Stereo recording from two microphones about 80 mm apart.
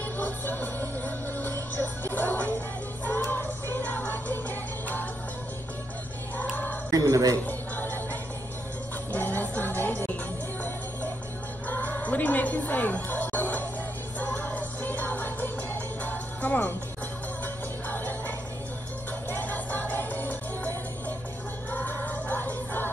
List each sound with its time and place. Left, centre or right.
0.2 s music: left
6.5 s a sound: left
6.9 s a man's voice: right
7.4 s music: left
11.6 s music: centre
17.8 s music: left